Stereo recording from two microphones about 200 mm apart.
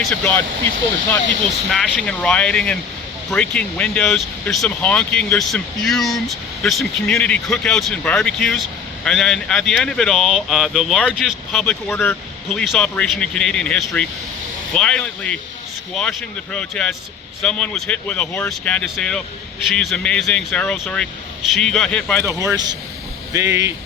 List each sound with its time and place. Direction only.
0.0 s speech: 5° left (ahead or behind)
1.7 s speech: centre (ahead or behind)
22.5 s speech: 20° right (ahead or behind)